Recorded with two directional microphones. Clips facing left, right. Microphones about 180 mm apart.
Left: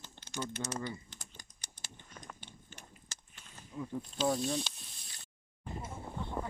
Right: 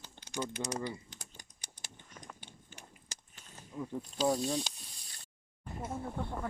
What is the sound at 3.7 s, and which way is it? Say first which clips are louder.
Speech: right 1 dB; 15° right (ahead or behind).